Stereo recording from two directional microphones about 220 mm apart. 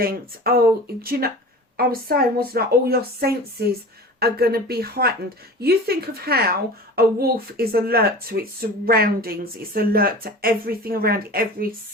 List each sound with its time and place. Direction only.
0.0 s a woman's voice: 45° right (ahead or behind)